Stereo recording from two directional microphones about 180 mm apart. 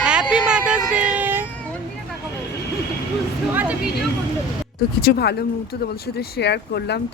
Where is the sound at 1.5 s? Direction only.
10° left (ahead or behind).